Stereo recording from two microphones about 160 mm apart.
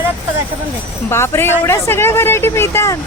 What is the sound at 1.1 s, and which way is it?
Speech, 15° left (ahead or behind).